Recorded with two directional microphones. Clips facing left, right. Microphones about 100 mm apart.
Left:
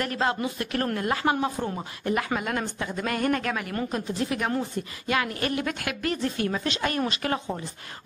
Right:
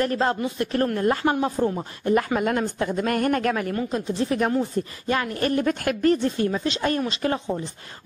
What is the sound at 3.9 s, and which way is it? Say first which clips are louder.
Speech: right 4 dB; 30° right (ahead or behind).